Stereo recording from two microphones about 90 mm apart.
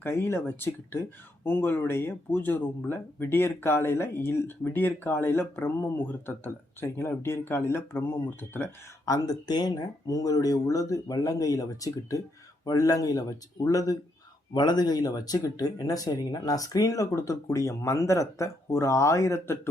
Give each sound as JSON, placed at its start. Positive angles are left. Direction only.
{"t": 0.0, "sound": "speech", "side_deg": 25}
{"t": 9.0, "sound": "speech", "side_deg": 45}
{"t": 14.5, "sound": "speech", "side_deg": 55}